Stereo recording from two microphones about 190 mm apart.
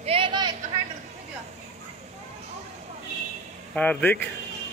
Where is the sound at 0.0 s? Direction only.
30° right (ahead or behind).